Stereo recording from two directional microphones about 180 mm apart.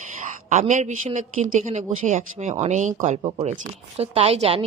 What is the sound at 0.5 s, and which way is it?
A woman's voice, 40° right (ahead or behind).